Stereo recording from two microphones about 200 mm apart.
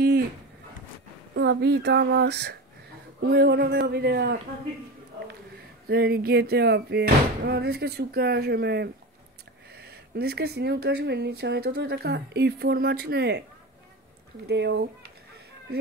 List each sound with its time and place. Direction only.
1.3 s speech: 60° right (ahead or behind)
5.9 s speech: 50° right (ahead or behind)
14.4 s speech: 55° right (ahead or behind)